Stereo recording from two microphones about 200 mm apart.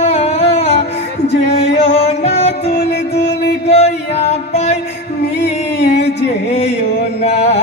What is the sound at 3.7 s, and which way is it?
Music, 35° left (ahead or behind).